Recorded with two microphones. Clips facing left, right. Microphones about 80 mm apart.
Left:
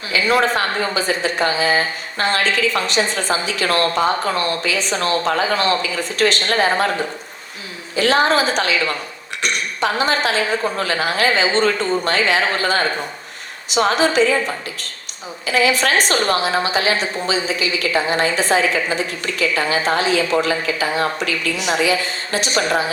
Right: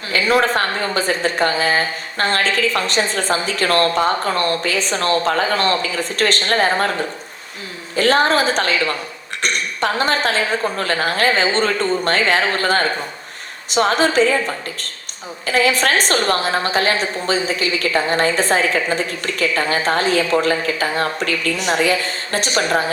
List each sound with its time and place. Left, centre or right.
0.3 s a woman's voice: right
7.9 s a woman's voice: right
15.4 s a woman's voice: right